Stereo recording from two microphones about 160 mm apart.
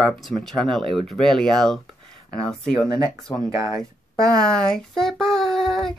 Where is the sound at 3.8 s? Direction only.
5° left (ahead or behind).